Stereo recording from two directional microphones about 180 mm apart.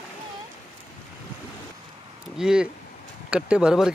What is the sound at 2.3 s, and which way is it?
Speech, 5° right (ahead or behind).